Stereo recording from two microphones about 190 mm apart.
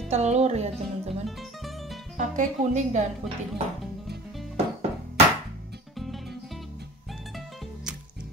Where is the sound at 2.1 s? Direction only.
40° right (ahead or behind).